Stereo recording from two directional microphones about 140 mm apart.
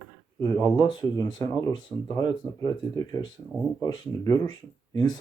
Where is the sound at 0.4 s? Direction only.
25° left (ahead or behind).